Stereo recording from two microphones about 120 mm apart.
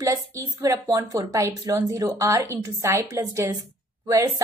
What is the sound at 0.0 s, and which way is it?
A woman's voice, 30° right (ahead or behind).